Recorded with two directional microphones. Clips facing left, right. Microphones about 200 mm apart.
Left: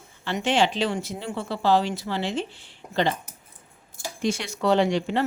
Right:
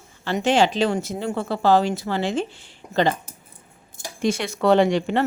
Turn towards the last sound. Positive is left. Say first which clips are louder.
# right 3 dB
turn(degrees=-55)  # may be behind; listen again after turning